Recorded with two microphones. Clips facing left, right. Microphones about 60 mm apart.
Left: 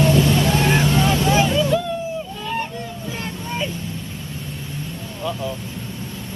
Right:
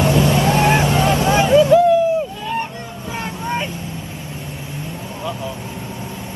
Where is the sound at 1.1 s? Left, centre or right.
Right.